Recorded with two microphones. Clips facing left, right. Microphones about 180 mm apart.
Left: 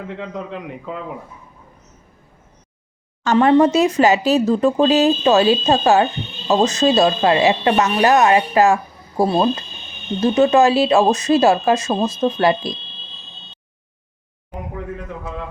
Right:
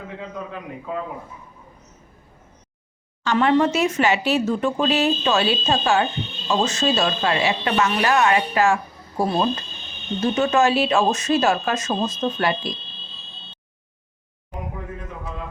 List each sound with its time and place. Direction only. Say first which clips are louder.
0.2 s a man's voice: left 4 dB; 75° left (ahead or behind)
3.3 s speech: left 5 dB; 35° left (ahead or behind)